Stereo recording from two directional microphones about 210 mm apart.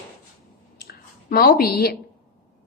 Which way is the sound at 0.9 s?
45° left (ahead or behind).